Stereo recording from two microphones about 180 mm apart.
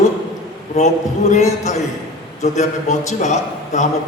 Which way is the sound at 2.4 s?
40° left (ahead or behind).